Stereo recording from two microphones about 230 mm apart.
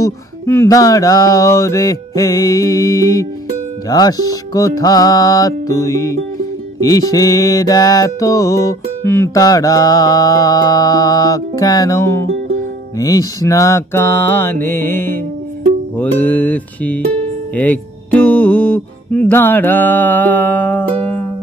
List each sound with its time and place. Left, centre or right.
0.0 s music: centre